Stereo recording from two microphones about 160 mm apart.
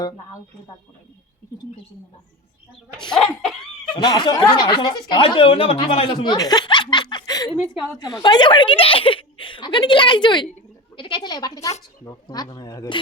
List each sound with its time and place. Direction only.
3.1 s a sound: 5° left (ahead or behind)
3.9 s speech: 25° left (ahead or behind)
7.6 s a woman's voice: centre (ahead or behind)
7.9 s speech: 25° left (ahead or behind)